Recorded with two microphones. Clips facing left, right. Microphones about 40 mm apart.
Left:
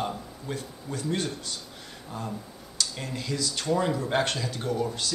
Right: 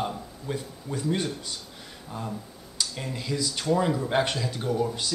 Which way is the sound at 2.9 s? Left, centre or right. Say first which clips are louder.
Right 1 dB; centre.